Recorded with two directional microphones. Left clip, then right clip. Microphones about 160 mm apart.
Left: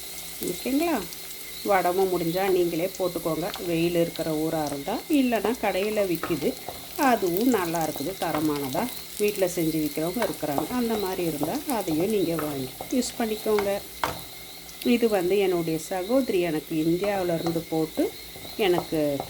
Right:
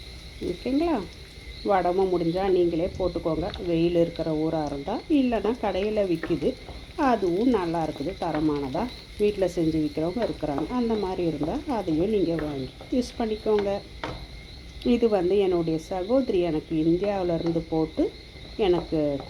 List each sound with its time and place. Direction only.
0.6 s speech: 10° left (ahead or behind)
3.0 s speech: 20° left (ahead or behind)
3.7 s speech: 10° left (ahead or behind)
6.9 s a sound: 10° left (ahead or behind)
7.5 s speech: 15° left (ahead or behind)
10.1 s speech: 20° left (ahead or behind)